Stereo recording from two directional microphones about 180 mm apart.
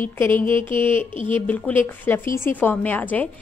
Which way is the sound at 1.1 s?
30° right (ahead or behind).